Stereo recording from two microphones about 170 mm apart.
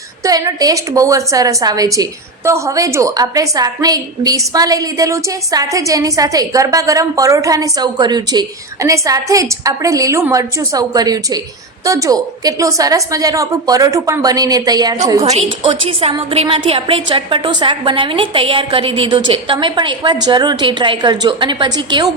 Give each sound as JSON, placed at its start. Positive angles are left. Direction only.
{"t": 0.3, "sound": "a woman's voice", "side_deg": -20}
{"t": 15.2, "sound": "a woman's voice", "side_deg": -35}